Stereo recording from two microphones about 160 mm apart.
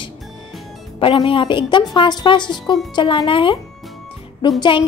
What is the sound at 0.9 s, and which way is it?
A woman's voice, 35° left (ahead or behind).